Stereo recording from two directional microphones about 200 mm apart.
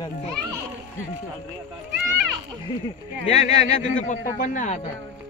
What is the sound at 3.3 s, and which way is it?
A man's voice, 35° left (ahead or behind).